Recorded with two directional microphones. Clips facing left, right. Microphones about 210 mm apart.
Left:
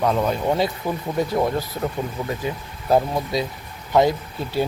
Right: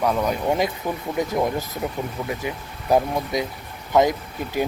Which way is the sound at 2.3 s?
15° right (ahead or behind).